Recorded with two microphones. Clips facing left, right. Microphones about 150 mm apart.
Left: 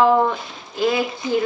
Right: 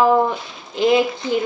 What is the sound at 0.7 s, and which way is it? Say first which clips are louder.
Speech: right 4 dB; 20° right (ahead or behind).